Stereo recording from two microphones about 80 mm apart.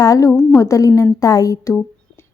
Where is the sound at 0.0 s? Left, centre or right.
Left.